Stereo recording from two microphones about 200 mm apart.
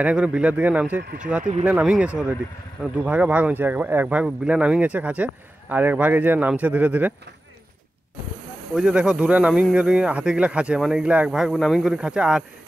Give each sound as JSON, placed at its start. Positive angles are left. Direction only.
{"t": 0.0, "sound": "speech", "side_deg": -5}
{"t": 8.7, "sound": "speech", "side_deg": -5}